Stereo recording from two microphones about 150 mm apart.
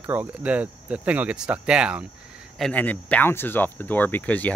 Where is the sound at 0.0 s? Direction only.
10° right (ahead or behind).